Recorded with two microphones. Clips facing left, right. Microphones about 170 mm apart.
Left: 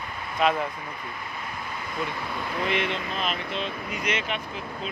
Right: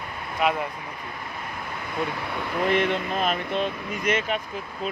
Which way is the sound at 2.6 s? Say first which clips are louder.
Right 6 dB; 50° right (ahead or behind).